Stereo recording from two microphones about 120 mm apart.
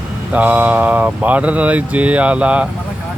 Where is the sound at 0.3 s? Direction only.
15° right (ahead or behind).